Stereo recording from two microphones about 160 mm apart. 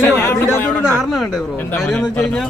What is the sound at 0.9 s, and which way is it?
Speech, centre (ahead or behind).